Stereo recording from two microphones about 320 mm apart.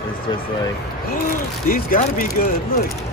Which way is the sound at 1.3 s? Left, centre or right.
Left.